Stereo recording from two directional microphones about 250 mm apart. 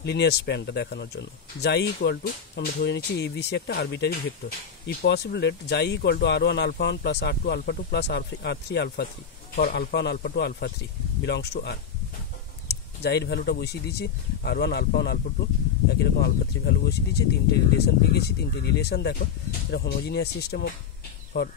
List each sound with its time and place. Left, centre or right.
0.0 s speech: left